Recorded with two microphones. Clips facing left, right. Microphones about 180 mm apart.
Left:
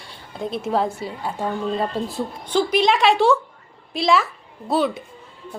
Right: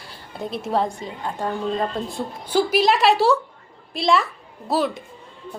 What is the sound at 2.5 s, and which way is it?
A woman's voice, 5° right (ahead or behind).